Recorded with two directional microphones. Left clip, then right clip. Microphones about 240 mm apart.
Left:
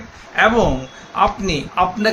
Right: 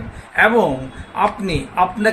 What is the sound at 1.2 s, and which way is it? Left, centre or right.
Speech, centre.